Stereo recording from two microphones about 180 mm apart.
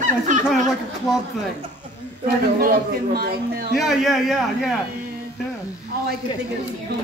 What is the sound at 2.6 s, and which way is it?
Speech, 55° right (ahead or behind).